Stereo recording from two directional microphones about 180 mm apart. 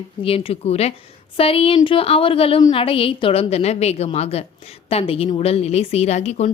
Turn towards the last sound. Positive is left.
turn(degrees=40)  # may be behind; listen again after turning